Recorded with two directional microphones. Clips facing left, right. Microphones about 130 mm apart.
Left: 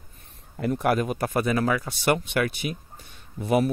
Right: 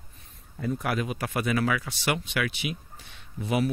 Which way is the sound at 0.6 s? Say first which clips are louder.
Left 4 dB; 70° left (ahead or behind).